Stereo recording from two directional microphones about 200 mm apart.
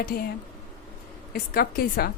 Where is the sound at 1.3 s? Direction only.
50° left (ahead or behind).